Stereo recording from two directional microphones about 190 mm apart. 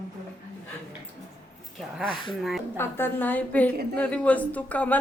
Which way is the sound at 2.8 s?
10° left (ahead or behind).